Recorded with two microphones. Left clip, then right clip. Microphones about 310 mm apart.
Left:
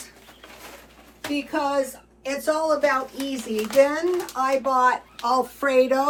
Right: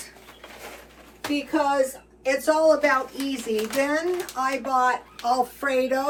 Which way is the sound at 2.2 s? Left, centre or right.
Centre.